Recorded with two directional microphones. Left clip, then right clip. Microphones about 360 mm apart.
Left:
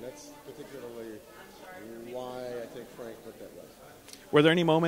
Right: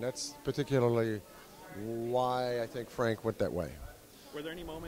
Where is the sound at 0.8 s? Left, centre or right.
Right.